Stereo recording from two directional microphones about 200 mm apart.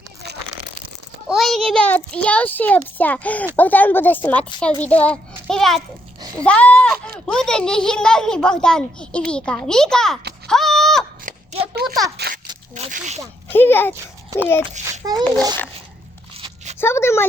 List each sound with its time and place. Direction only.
1.3 s a child's voice: centre (ahead or behind)
10.4 s a sound: centre (ahead or behind)
11.3 s a sound: 40° right (ahead or behind)
11.7 s a child's voice: 55° right (ahead or behind)
12.7 s biting: 35° right (ahead or behind)
13.5 s a child's voice: 10° left (ahead or behind)
13.9 s a child's voice: 10° right (ahead or behind)
14.4 s a child's voice: 10° left (ahead or behind)
15.0 s a child's voice: 20° right (ahead or behind)
16.3 s a sound: 30° right (ahead or behind)
16.7 s speech: 10° left (ahead or behind)